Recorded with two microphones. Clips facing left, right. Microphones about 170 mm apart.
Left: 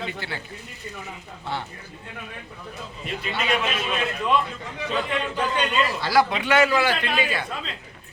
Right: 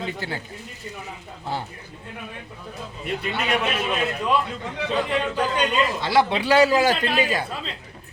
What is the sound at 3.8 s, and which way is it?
Speech, 10° right (ahead or behind).